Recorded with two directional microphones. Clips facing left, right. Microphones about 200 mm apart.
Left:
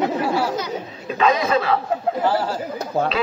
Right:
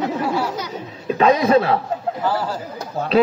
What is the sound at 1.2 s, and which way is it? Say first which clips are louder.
Speech: right 4 dB; 40° right (ahead or behind).